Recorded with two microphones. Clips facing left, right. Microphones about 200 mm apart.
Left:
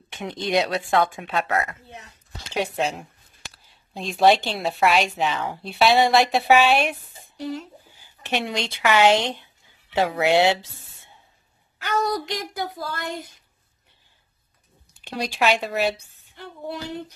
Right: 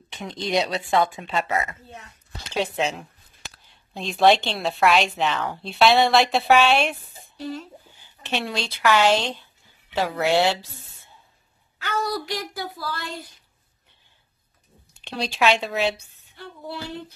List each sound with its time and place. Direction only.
0.4 s a woman's voice: centre (ahead or behind)
1.9 s a woman's voice: 20° left (ahead or behind)
7.3 s a woman's voice: 20° left (ahead or behind)
11.8 s speech: 20° left (ahead or behind)
15.0 s a woman's voice: 10° left (ahead or behind)
16.3 s a sound: 20° left (ahead or behind)